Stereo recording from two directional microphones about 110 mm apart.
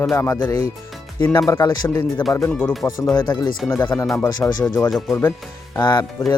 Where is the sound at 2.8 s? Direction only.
15° left (ahead or behind).